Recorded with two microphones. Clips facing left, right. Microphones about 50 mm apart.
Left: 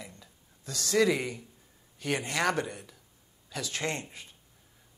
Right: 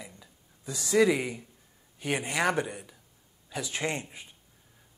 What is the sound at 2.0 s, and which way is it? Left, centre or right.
Speech, centre.